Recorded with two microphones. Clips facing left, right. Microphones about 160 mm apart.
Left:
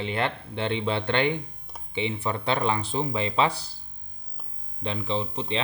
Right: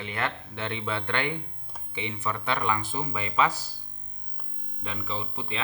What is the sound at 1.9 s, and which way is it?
Speech, 30° left (ahead or behind).